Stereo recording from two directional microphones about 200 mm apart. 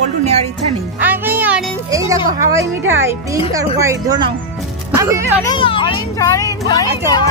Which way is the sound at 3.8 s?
15° right (ahead or behind).